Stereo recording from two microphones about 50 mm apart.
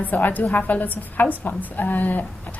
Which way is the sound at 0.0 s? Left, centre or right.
Left.